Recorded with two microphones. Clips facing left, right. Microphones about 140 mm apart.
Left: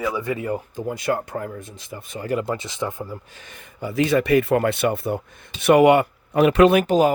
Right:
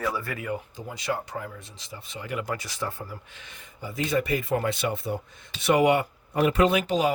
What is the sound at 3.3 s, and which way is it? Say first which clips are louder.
Speech: left 4 dB; 50° left (ahead or behind).